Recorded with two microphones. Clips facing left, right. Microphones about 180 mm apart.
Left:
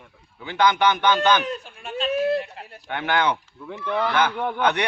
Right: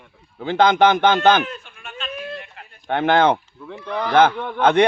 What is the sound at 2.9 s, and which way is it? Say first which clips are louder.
A man's voice: right 7 dB; 50° right (ahead or behind).